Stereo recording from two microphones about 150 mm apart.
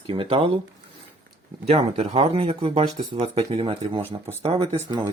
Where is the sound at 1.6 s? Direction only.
45° right (ahead or behind).